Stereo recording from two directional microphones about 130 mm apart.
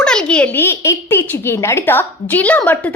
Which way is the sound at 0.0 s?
5° left (ahead or behind).